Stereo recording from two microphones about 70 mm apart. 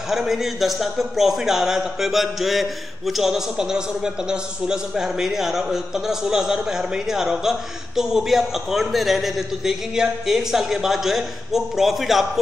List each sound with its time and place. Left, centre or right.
0.1 s a man's voice: centre